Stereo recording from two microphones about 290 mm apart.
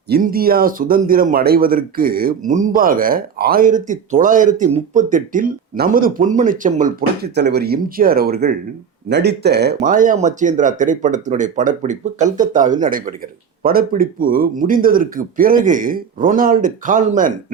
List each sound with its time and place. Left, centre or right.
0.1 s speech: right